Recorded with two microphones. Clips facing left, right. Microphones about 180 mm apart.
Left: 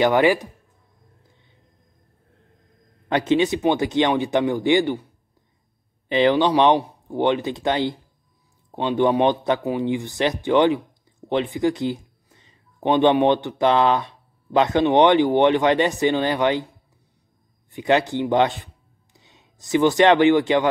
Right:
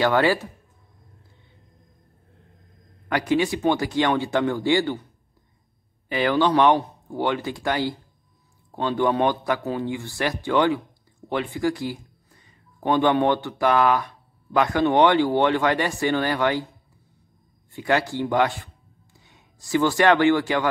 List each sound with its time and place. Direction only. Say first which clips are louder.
0.0 s speech: left 3 dB; 15° left (ahead or behind)
3.1 s a man's voice: left 3 dB; 20° left (ahead or behind)
6.0 s a man's voice: left 3 dB; 20° left (ahead or behind)
17.6 s a man's voice: left 3 dB; 20° left (ahead or behind)